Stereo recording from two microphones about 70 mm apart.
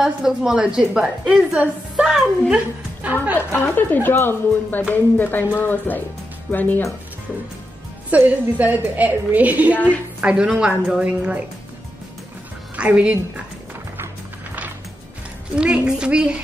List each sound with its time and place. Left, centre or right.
0.0 s a woman's voice: centre
2.5 s a woman's voice: right
3.3 s speech: left
8.1 s a woman's voice: right
12.7 s speech: centre
13.9 s music: right
15.5 s a woman's voice: centre